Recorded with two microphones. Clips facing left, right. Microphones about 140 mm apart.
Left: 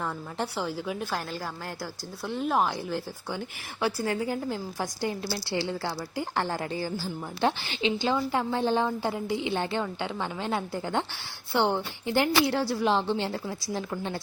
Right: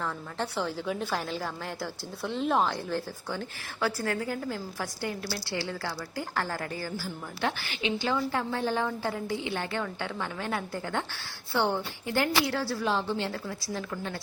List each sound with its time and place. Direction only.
0.0 s a woman's voice: 10° left (ahead or behind)